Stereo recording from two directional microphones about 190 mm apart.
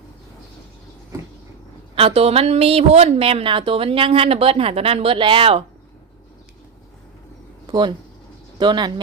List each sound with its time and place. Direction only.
2.0 s a woman's voice: 30° right (ahead or behind)
7.7 s speech: 25° right (ahead or behind)